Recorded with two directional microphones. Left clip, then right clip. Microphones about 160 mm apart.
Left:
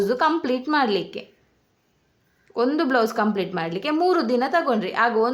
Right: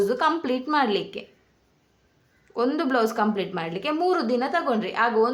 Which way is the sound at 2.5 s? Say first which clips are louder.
Left 3 dB; 20° left (ahead or behind).